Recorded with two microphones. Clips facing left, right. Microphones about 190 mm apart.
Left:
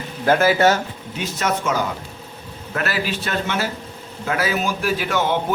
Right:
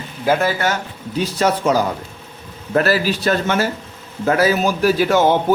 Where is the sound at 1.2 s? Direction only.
35° right (ahead or behind).